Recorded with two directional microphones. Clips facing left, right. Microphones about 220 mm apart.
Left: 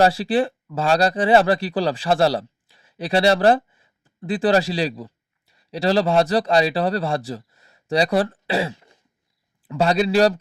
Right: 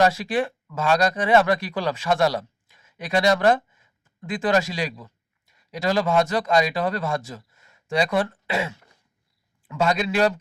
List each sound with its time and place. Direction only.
0.0 s a man's voice: 30° left (ahead or behind)